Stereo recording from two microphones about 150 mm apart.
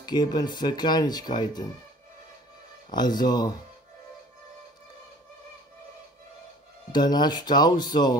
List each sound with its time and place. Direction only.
0.0 s speech: 30° left (ahead or behind)
2.9 s speech: 30° left (ahead or behind)
6.9 s speech: 30° left (ahead or behind)